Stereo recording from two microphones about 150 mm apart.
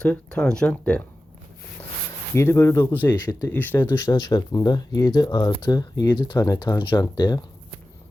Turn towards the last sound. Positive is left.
turn(degrees=25)  # may be behind; listen again after turning